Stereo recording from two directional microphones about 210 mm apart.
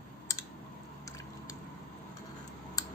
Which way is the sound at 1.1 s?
15° left (ahead or behind).